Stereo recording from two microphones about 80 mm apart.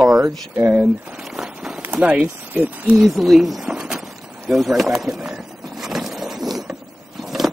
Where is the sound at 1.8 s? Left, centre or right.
Centre.